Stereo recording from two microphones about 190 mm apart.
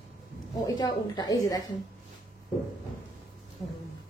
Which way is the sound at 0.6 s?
20° left (ahead or behind).